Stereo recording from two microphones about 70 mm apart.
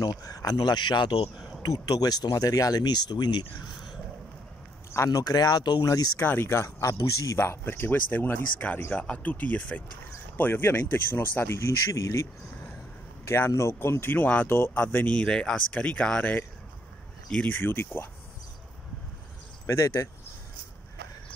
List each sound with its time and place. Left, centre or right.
0.0 s speech: left
1.6 s speech: left
5.1 s speech: left
5.9 s speech: left
6.2 s speech: left
6.8 s speech: left
11.9 s speech: left
13.2 s speech: left
15.1 s speech: centre
17.5 s speech: left
19.6 s speech: left